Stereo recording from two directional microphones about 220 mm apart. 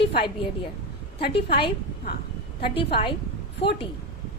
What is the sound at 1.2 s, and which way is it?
Speech, 45° left (ahead or behind).